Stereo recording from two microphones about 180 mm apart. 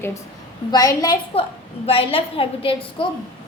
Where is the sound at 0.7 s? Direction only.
20° left (ahead or behind).